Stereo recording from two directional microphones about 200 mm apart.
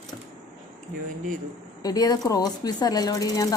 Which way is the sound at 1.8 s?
20° left (ahead or behind).